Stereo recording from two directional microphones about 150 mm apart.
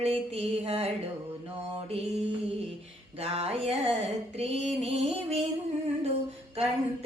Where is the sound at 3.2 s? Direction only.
45° right (ahead or behind).